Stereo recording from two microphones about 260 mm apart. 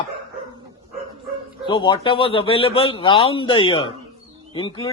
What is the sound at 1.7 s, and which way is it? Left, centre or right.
A man's voice, centre.